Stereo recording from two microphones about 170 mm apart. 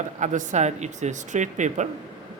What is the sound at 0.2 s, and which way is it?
Speech, 45° right (ahead or behind).